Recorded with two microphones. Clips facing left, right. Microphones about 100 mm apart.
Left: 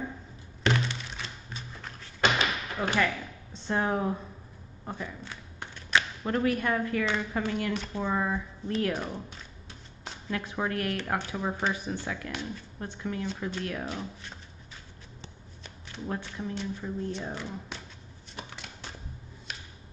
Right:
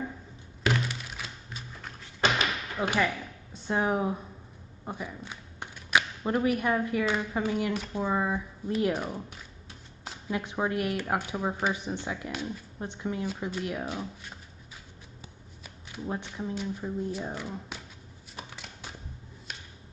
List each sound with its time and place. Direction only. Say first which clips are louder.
0.7 s music: left 1 dB; 5° right (ahead or behind)
2.3 s a sound: even; 15° right (ahead or behind)
4.8 s speech: even; 15° right (ahead or behind)
10.3 s speech: right 2 dB; 20° right (ahead or behind)
15.2 s speech: left 2 dB; 10° right (ahead or behind)
18.3 s a sound: left 1 dB; 5° right (ahead or behind)